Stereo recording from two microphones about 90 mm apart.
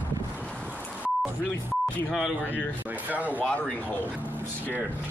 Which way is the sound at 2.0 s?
Centre (ahead or behind).